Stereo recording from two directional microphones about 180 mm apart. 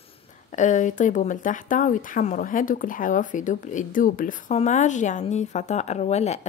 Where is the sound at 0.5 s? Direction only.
40° left (ahead or behind).